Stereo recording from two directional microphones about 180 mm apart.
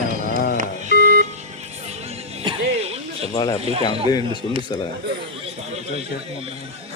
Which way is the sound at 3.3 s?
20° left (ahead or behind).